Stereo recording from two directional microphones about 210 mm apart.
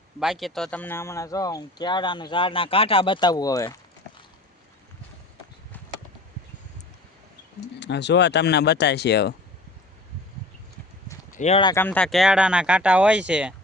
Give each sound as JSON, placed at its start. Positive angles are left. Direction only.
{"t": 0.2, "sound": "speech", "side_deg": 0}
{"t": 7.8, "sound": "speech", "side_deg": 55}
{"t": 11.3, "sound": "speech", "side_deg": 30}
{"t": 11.7, "sound": "speech", "side_deg": 10}